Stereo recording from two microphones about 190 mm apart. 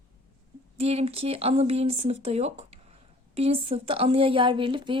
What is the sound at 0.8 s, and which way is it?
A woman's voice, 30° right (ahead or behind).